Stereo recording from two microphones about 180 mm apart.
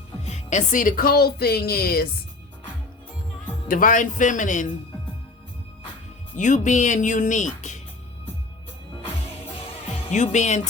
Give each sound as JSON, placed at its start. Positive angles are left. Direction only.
{"t": 0.3, "sound": "speech", "side_deg": 40}
{"t": 3.7, "sound": "speech", "side_deg": 50}
{"t": 6.3, "sound": "speech", "side_deg": 45}
{"t": 10.1, "sound": "speech", "side_deg": 40}